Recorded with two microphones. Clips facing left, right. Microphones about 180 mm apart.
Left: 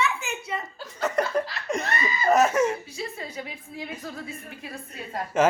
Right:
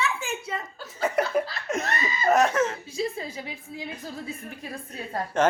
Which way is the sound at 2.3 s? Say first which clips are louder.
Left 1 dB; 5° left (ahead or behind).